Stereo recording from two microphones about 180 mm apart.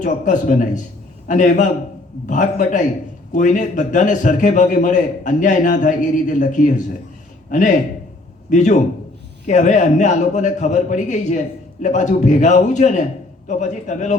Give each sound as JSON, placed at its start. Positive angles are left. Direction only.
{"t": 0.0, "sound": "a man's voice", "side_deg": 45}
{"t": 8.4, "sound": "a man's voice", "side_deg": 40}